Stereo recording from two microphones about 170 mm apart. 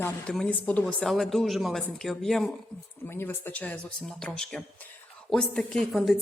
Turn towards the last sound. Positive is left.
turn(degrees=0)  # may be behind; listen again after turning